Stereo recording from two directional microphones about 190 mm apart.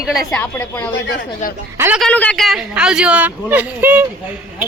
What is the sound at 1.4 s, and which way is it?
Speech, 40° left (ahead or behind).